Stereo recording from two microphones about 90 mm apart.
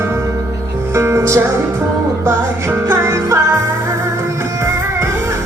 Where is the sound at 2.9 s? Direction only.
35° right (ahead or behind).